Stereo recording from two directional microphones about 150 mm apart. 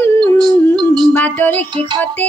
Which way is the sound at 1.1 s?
10° left (ahead or behind).